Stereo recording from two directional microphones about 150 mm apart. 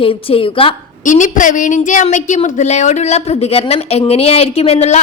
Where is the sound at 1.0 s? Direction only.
60° left (ahead or behind).